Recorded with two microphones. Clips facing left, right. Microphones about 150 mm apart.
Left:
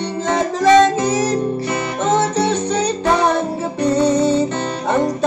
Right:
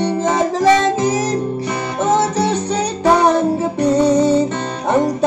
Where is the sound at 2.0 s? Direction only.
15° right (ahead or behind).